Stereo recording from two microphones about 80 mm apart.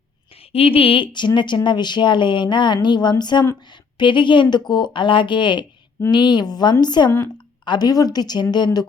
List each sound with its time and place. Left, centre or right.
0.9 s speech: left
3.9 s speech: left
6.1 s speech: left